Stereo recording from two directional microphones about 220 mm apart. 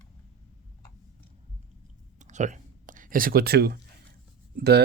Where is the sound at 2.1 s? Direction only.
35° right (ahead or behind).